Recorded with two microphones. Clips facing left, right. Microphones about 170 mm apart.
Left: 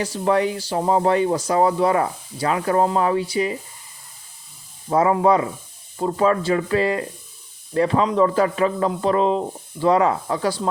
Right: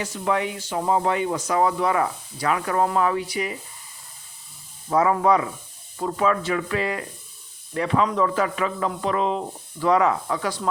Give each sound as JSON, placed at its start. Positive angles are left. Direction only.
{"t": 0.0, "sound": "speech", "side_deg": 35}
{"t": 4.9, "sound": "speech", "side_deg": 30}